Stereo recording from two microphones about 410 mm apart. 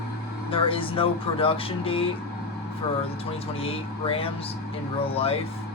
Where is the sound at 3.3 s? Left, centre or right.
Centre.